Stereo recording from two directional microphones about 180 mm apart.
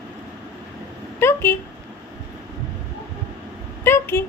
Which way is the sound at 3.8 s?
15° left (ahead or behind).